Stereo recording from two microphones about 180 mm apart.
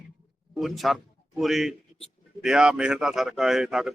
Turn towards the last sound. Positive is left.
turn(degrees=0)  # may be behind; listen again after turning